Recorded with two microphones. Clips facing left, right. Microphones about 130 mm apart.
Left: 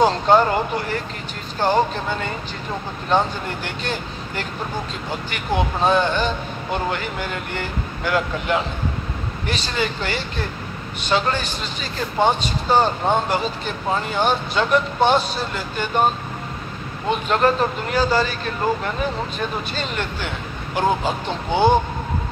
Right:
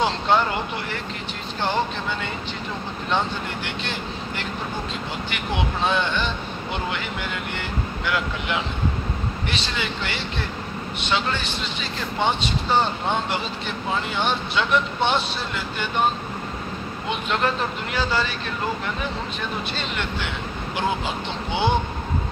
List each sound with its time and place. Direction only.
0.0 s speech: 40° left (ahead or behind)
17.1 s speech: 40° left (ahead or behind)
19.7 s speech: 45° left (ahead or behind)